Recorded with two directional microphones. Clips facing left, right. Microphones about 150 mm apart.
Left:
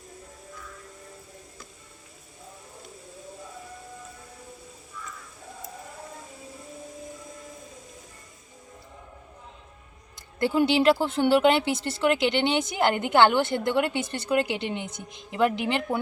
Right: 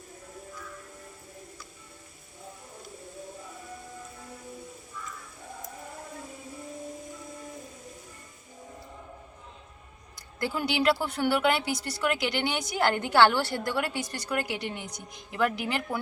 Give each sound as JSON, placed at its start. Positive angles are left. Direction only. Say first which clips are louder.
{"t": 10.4, "sound": "speech", "louder": "left 6 dB", "side_deg": 25}